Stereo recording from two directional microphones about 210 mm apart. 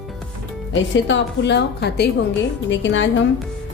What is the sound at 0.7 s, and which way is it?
A woman's voice, 60° left (ahead or behind).